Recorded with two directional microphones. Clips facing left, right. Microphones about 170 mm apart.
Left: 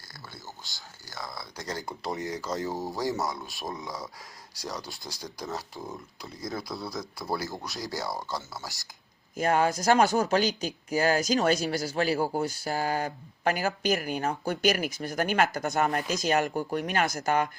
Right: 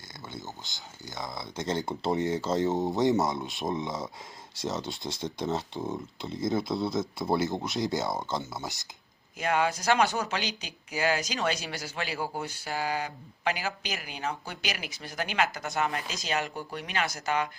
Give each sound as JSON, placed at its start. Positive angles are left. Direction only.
{"t": 0.3, "sound": "speech", "side_deg": -20}
{"t": 9.3, "sound": "speech", "side_deg": 45}